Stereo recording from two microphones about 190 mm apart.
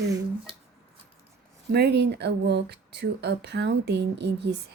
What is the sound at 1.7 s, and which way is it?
Speech, 60° right (ahead or behind).